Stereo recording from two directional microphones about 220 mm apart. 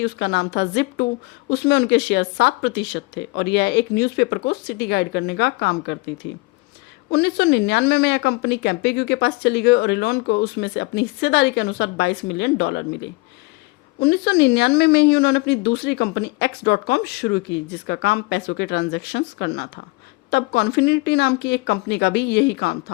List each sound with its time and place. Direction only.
0.0 s speech: 50° left (ahead or behind)